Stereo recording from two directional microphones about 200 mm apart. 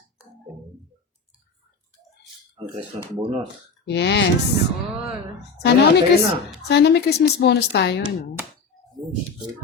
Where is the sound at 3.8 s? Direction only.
60° left (ahead or behind).